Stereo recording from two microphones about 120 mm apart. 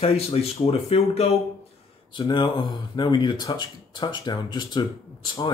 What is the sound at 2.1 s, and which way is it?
Speech, 40° left (ahead or behind).